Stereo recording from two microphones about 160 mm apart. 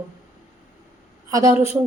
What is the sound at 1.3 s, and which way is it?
Speech, 20° right (ahead or behind).